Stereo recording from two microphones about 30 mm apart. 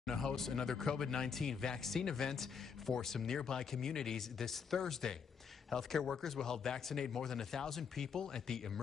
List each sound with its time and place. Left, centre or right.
0.0 s speech: centre